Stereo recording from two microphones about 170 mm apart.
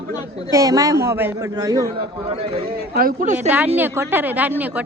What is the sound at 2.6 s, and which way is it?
Speech, 65° right (ahead or behind).